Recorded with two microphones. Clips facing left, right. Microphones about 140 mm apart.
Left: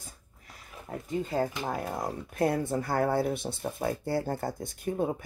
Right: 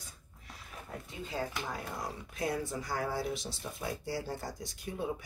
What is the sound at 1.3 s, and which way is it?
Speech, 50° left (ahead or behind).